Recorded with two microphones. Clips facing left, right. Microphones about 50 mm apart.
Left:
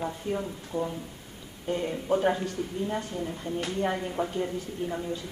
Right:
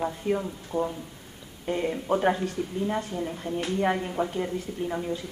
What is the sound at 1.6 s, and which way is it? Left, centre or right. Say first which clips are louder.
Speech: right 2 dB; right.